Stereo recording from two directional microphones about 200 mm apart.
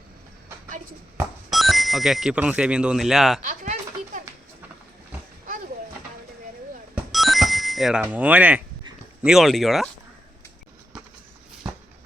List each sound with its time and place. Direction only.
1.5 s speech: centre (ahead or behind)
3.4 s a sound: 40° right (ahead or behind)
6.9 s music: centre (ahead or behind)
8.0 s speech: 10° right (ahead or behind)